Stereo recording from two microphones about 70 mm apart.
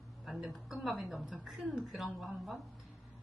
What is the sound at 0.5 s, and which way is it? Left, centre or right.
A woman's voice, centre.